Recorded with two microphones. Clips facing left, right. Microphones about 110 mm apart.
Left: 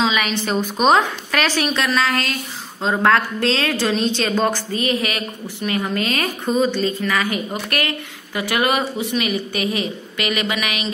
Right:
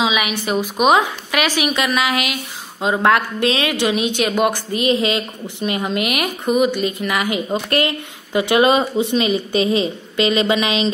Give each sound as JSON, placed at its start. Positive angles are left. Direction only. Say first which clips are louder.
{"t": 0.0, "sound": "a woman's voice", "louder": "even", "side_deg": -10}